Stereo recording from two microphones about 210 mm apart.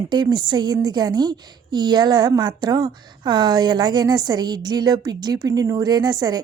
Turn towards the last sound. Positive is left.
turn(degrees=-20)  # may be behind; listen again after turning